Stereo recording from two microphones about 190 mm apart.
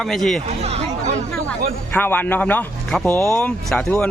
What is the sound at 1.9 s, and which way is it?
Speech, 10° left (ahead or behind).